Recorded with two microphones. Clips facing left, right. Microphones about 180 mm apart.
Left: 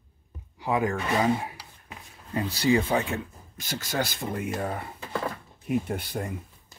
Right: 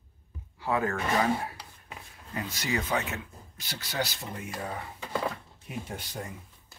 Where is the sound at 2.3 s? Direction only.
30° left (ahead or behind).